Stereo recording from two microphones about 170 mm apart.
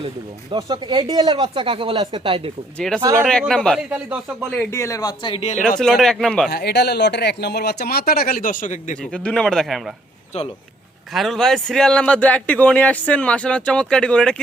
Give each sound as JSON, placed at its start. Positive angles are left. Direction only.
{"t": 0.5, "sound": "speech", "side_deg": -25}
{"t": 2.7, "sound": "a man's voice", "side_deg": 5}
{"t": 3.8, "sound": "speech", "side_deg": -5}
{"t": 4.7, "sound": "speech", "side_deg": 20}
{"t": 5.4, "sound": "speech", "side_deg": 45}
{"t": 5.8, "sound": "a man's voice", "side_deg": 0}
{"t": 6.5, "sound": "speech", "side_deg": 70}
{"t": 9.0, "sound": "a man's voice", "side_deg": 5}
{"t": 11.1, "sound": "a man's voice", "side_deg": 0}